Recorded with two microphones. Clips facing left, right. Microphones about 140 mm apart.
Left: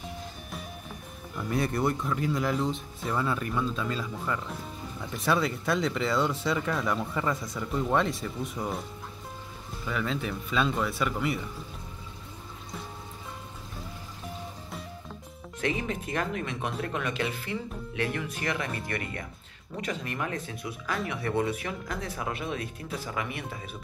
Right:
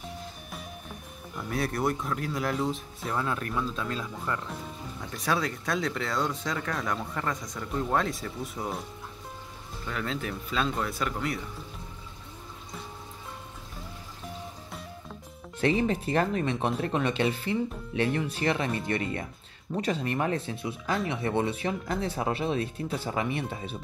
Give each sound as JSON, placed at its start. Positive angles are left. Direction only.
{"t": 1.3, "sound": "speech", "side_deg": 0}
{"t": 9.8, "sound": "speech", "side_deg": 0}
{"t": 15.6, "sound": "speech", "side_deg": -35}